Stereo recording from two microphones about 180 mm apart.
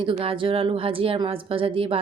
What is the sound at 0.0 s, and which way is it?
Speech, 30° right (ahead or behind).